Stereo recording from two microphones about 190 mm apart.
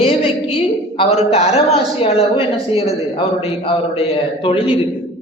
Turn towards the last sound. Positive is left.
turn(degrees=30)  # may be behind; listen again after turning